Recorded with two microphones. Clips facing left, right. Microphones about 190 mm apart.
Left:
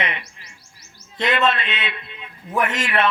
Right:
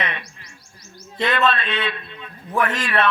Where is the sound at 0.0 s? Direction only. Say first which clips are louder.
Left 1 dB; 25° left (ahead or behind).